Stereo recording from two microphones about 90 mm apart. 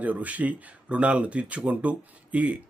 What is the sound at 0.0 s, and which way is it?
Speech, 15° right (ahead or behind).